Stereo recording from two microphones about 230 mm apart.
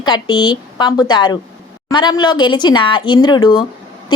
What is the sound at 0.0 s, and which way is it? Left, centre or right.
A woman's voice, centre.